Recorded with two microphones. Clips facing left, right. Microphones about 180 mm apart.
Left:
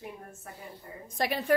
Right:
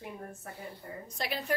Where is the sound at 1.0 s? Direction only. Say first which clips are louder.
Left 7 dB; 55° left (ahead or behind).